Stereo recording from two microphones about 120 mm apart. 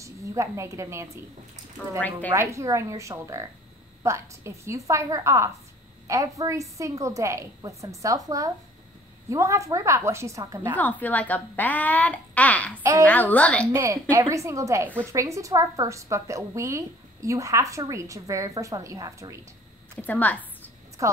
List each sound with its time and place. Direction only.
0.0 s a woman's voice: 25° right (ahead or behind)
10.8 s a woman's voice: 15° left (ahead or behind)
13.7 s a woman's voice: 25° right (ahead or behind)
20.0 s a woman's voice: 15° left (ahead or behind)
21.0 s a woman's voice: 25° right (ahead or behind)